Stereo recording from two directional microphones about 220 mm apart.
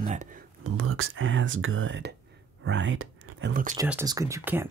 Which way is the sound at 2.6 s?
60° right (ahead or behind).